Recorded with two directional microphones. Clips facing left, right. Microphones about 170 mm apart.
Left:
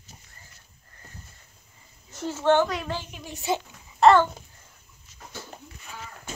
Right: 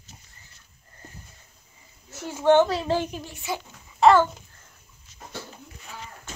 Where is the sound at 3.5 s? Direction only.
25° left (ahead or behind).